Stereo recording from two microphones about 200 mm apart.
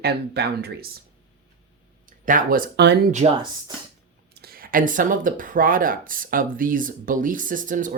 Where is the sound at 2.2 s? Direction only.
45° right (ahead or behind).